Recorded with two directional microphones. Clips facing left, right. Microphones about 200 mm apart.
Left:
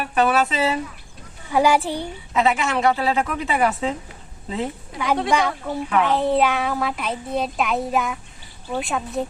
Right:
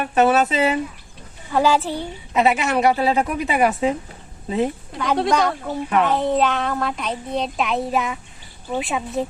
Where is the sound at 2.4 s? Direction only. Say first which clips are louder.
Right 2 dB; 20° right (ahead or behind).